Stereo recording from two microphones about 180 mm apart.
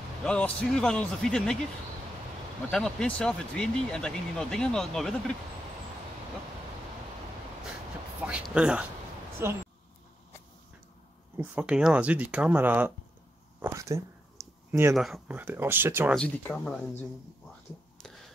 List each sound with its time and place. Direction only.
0.2 s speech: 5° left (ahead or behind)
2.7 s speech: 5° left (ahead or behind)
8.2 s speech: 5° right (ahead or behind)
11.3 s speech: 5° right (ahead or behind)
15.0 s speech: centre (ahead or behind)
16.2 s speech: 5° left (ahead or behind)